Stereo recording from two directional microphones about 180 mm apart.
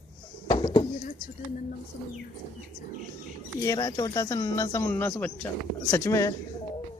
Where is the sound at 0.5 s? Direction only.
30° left (ahead or behind).